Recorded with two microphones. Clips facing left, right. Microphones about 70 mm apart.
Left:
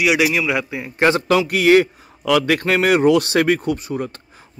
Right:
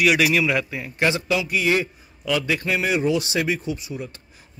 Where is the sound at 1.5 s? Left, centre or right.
Left.